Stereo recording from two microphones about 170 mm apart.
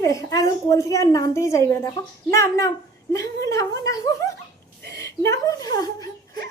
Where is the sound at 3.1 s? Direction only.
20° left (ahead or behind).